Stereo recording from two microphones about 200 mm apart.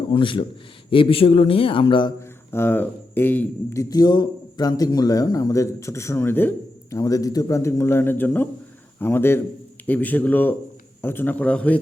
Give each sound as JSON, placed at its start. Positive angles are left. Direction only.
{"t": 0.1, "sound": "a man's voice", "side_deg": 25}
{"t": 2.5, "sound": "a man's voice", "side_deg": 10}